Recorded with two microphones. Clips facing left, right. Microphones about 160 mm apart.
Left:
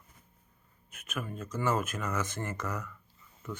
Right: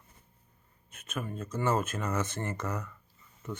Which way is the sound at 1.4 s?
25° right (ahead or behind).